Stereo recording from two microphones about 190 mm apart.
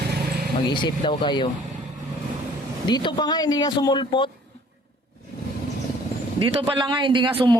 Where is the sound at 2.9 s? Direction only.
25° left (ahead or behind).